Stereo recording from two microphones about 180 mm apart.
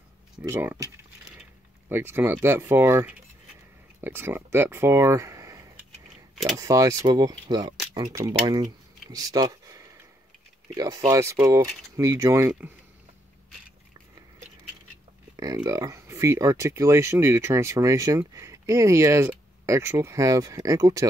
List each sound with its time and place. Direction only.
0.4 s speech: 10° right (ahead or behind)
1.9 s speech: 10° right (ahead or behind)
15.3 s speech: 20° right (ahead or behind)